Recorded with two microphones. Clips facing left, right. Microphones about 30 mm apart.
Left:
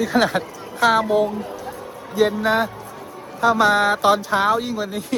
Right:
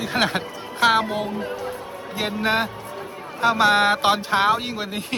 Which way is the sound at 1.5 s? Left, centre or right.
Right.